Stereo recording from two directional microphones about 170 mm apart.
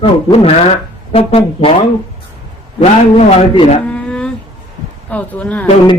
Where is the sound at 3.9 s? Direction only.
5° left (ahead or behind).